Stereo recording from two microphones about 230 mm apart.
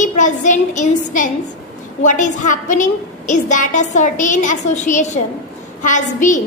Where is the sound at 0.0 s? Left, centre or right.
Left.